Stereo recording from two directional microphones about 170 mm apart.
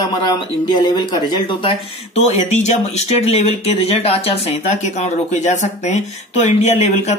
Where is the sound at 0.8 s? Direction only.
25° left (ahead or behind).